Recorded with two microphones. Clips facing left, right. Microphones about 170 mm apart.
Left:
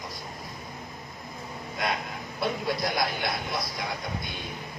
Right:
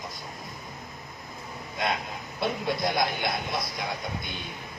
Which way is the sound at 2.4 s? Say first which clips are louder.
Right 1 dB; 25° right (ahead or behind).